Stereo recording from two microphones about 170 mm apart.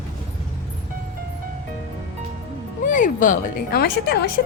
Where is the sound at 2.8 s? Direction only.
50° left (ahead or behind); by 4.3 s 70° left (ahead or behind).